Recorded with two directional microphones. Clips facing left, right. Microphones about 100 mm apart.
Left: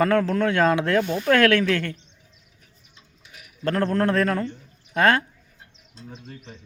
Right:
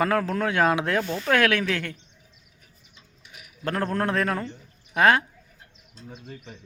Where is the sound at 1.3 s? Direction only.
10° right (ahead or behind).